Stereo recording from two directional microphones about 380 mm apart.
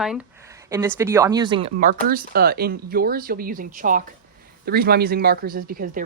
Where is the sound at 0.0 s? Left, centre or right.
Centre.